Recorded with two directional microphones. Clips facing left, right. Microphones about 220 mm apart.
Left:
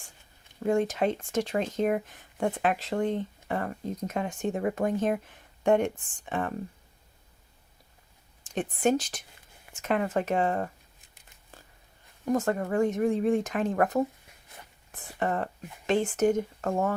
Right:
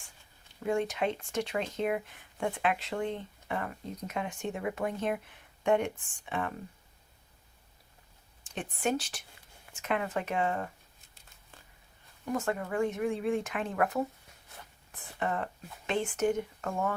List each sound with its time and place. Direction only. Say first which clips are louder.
0.6 s speech: left 5 dB; 40° left (ahead or behind)
8.4 s speech: left 6 dB; 40° left (ahead or behind)
12.2 s speech: left 6 dB; 40° left (ahead or behind)